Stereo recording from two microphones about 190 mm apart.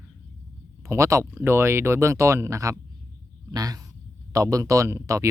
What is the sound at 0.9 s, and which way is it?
Speech, 15° right (ahead or behind).